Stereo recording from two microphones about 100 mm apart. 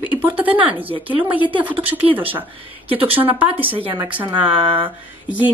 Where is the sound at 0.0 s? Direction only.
20° right (ahead or behind).